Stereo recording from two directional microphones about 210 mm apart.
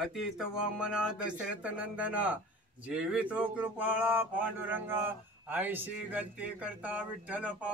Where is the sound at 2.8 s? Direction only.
5° right (ahead or behind).